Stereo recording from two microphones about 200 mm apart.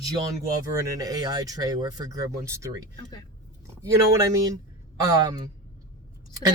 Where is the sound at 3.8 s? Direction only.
15° right (ahead or behind).